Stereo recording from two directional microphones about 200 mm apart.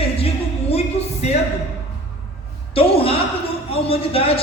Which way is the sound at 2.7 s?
30° left (ahead or behind).